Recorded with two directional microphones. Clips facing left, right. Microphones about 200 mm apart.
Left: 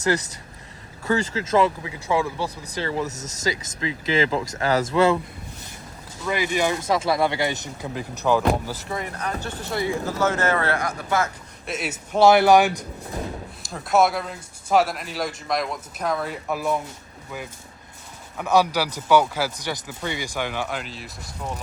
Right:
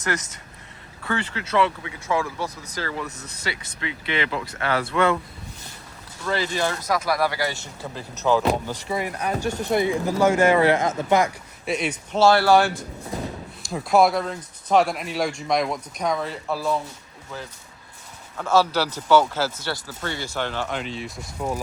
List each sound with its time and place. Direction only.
1.0 s speech: 35° left (ahead or behind)
6.2 s speech: 15° left (ahead or behind)
6.7 s speech: 25° left (ahead or behind); by 8.9 s 5° left (ahead or behind)
8.9 s speech: 10° right (ahead or behind)
11.6 s speech: 5° left (ahead or behind)
12.2 s speech: 20° left (ahead or behind)
13.7 s speech: centre (ahead or behind)
18.3 s speech: 15° left (ahead or behind)